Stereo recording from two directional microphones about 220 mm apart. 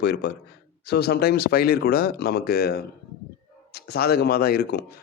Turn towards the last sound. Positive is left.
turn(degrees=45)  # may be behind; listen again after turning